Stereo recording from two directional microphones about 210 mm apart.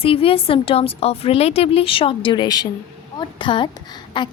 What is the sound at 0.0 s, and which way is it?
Speech, 25° left (ahead or behind).